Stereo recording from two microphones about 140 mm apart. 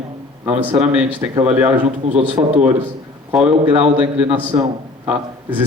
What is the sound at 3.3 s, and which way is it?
A man's voice, 10° right (ahead or behind).